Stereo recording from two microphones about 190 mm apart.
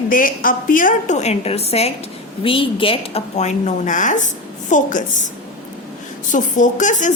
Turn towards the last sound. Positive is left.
turn(degrees=40)  # may be behind; listen again after turning